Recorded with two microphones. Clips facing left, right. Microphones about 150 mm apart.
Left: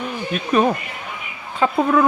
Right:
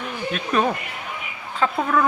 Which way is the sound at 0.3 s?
10° left (ahead or behind).